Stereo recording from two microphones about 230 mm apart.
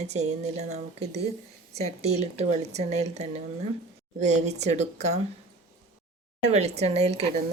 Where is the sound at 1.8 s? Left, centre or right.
Right.